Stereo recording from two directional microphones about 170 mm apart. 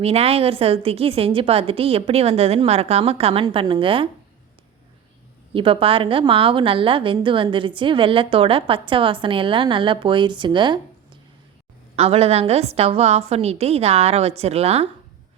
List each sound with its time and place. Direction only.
0.0 s a woman's voice: 35° right (ahead or behind)
5.5 s a woman's voice: 30° right (ahead or behind)
11.9 s a woman's voice: 35° right (ahead or behind)